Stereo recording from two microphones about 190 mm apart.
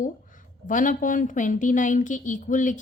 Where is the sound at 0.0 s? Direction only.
45° left (ahead or behind).